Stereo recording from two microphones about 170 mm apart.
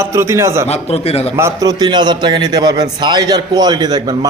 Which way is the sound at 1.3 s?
20° right (ahead or behind).